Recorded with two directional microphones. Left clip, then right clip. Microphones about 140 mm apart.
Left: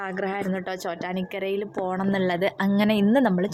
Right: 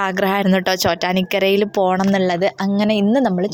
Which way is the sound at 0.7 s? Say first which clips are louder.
Right 12 dB; 90° right.